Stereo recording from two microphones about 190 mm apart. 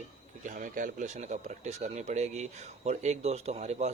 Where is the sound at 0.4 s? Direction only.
45° right (ahead or behind).